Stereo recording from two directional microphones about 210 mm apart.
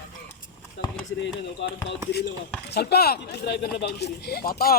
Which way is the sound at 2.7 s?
50° left (ahead or behind).